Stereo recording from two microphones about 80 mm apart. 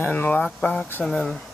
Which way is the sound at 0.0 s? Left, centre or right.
Left.